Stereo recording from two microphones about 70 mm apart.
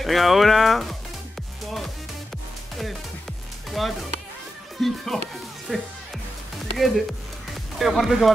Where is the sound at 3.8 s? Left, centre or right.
Centre.